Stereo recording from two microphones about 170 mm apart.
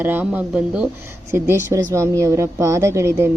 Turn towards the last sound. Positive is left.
turn(degrees=-15)  # may be behind; listen again after turning